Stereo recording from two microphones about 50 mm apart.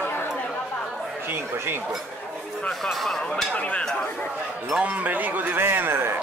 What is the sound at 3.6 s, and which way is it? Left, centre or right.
Speech, left.